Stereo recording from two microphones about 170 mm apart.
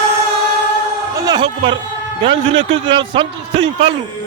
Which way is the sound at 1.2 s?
25° right (ahead or behind).